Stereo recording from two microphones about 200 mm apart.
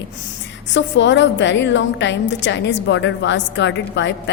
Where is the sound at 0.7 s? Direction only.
65° left (ahead or behind).